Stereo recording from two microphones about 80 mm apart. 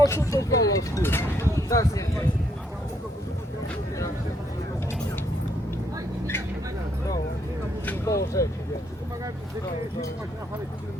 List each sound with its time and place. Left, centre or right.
0.0 s speech: left
1.0 s speech: left
1.5 s speech: left
8.0 s speech: left